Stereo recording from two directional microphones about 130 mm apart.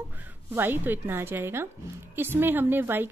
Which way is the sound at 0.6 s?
15° right (ahead or behind).